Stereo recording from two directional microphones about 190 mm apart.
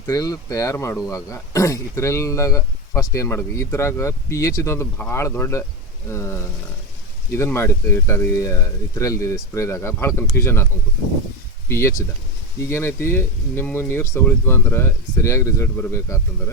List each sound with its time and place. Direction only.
0.1 s speech: 20° left (ahead or behind)
11.7 s speech: 15° left (ahead or behind)